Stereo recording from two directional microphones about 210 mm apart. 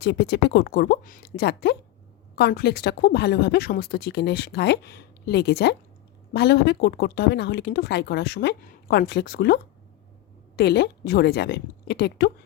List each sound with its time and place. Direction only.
0.0 s speech: 50° left (ahead or behind)
10.6 s speech: 50° left (ahead or behind)